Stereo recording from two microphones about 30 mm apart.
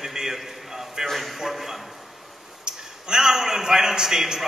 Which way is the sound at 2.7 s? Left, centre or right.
Right.